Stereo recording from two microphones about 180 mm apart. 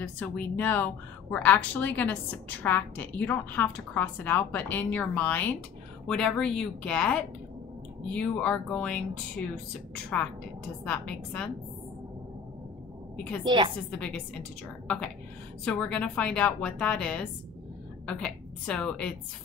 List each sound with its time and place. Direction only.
0.0 s a woman's voice: 10° left (ahead or behind)
10.8 s a woman's voice: 5° left (ahead or behind)
13.4 s a woman's voice: 25° right (ahead or behind)
13.8 s a woman's voice: 5° left (ahead or behind)
15.6 s a woman's voice: 5° left (ahead or behind)